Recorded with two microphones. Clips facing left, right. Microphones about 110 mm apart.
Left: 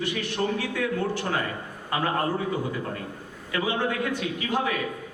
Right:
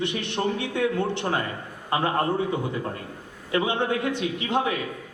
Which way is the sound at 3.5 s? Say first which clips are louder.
Right 3 dB; 25° right (ahead or behind).